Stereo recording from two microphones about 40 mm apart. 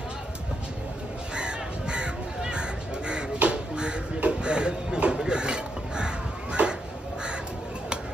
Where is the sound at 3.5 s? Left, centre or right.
Right.